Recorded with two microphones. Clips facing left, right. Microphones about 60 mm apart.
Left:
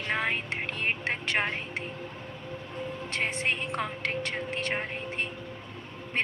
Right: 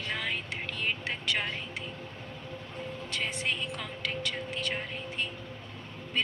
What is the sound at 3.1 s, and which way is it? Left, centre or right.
A woman's voice, left.